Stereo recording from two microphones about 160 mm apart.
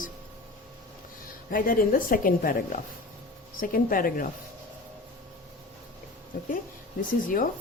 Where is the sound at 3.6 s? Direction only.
60° left (ahead or behind).